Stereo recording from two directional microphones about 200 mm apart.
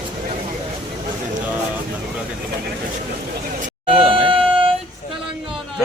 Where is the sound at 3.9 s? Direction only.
25° right (ahead or behind).